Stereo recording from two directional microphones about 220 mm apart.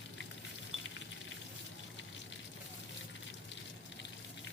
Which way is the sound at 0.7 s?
Centre (ahead or behind).